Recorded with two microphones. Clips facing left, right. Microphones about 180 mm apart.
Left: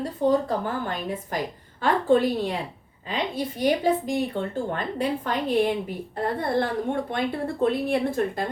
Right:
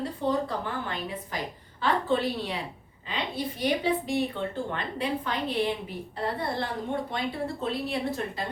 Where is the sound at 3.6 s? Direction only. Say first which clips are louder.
Left 5 dB; 45° left (ahead or behind).